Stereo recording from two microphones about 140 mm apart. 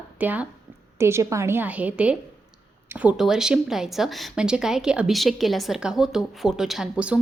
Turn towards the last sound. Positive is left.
turn(degrees=-5)  # may be behind; listen again after turning